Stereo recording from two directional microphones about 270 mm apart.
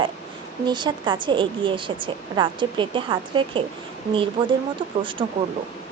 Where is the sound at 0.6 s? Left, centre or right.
Centre.